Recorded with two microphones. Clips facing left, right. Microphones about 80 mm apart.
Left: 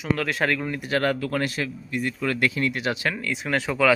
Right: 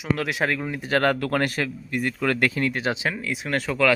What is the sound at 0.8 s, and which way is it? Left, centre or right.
Speech, right.